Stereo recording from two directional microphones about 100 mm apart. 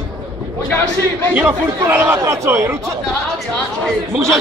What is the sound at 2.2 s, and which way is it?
Speech, 30° right (ahead or behind).